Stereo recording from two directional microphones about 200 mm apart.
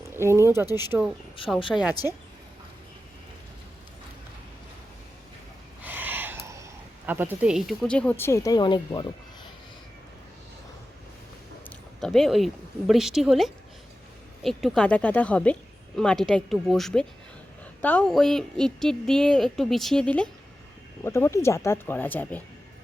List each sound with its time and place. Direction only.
0.1 s speech: 15° right (ahead or behind)
1.4 s a woman's voice: 25° left (ahead or behind)
1.7 s a woman's voice: 5° right (ahead or behind)
5.8 s speech: 10° right (ahead or behind); by 9.0 s 25° left (ahead or behind)
11.9 s a woman's voice: centre (ahead or behind)